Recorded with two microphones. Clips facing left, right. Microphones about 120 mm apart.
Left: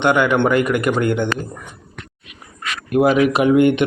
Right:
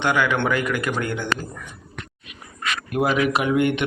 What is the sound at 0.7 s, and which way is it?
Speech, 60° left (ahead or behind).